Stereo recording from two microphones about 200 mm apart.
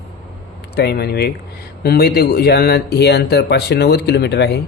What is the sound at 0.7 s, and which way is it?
Speech, 55° left (ahead or behind).